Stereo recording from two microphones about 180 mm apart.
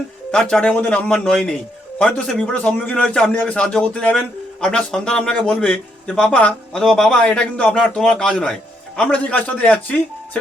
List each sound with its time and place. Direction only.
0.3 s a man's voice: 5° left (ahead or behind)